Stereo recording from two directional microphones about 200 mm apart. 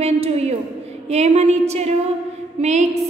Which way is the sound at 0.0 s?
30° right (ahead or behind).